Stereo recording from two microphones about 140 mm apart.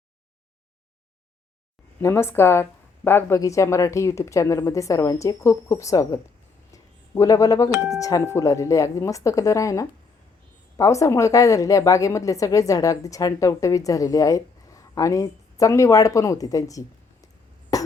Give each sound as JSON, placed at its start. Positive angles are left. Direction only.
{"t": 2.0, "sound": "a woman's voice", "side_deg": 20}
{"t": 17.7, "sound": "cough", "side_deg": 25}